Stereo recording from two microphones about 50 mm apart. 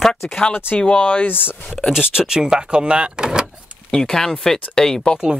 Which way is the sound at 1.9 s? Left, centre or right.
Centre.